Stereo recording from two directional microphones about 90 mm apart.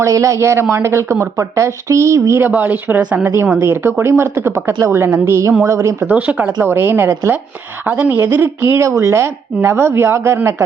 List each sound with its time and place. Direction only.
0.0 s speech: 35° right (ahead or behind)
2.5 s speech: 20° right (ahead or behind)
6.1 s speech: 15° right (ahead or behind)